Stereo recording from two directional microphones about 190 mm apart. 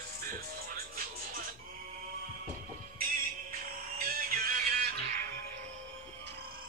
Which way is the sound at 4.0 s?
50° right (ahead or behind).